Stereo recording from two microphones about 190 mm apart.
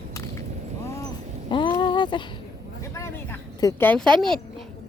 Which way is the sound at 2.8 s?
15° left (ahead or behind).